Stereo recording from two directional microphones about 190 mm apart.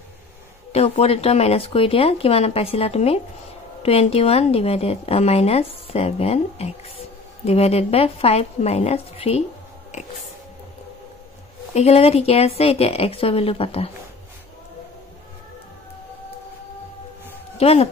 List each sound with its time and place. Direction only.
0.7 s speech: 30° left (ahead or behind)
11.7 s speech: 35° left (ahead or behind)
17.6 s speech: 30° left (ahead or behind)